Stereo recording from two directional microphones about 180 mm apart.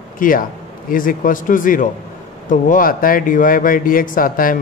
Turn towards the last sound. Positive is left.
turn(degrees=50)  # may be behind; listen again after turning